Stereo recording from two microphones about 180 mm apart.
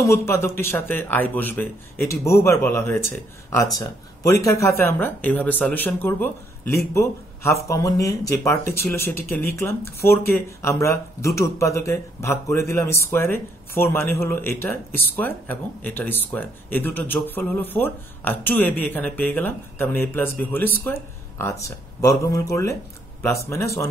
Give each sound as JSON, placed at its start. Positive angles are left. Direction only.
{"t": 0.0, "sound": "a man's voice", "side_deg": 15}